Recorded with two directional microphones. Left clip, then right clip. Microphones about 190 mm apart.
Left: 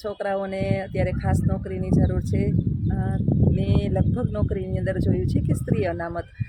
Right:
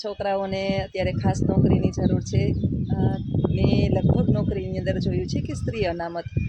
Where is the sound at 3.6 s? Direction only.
10° right (ahead or behind).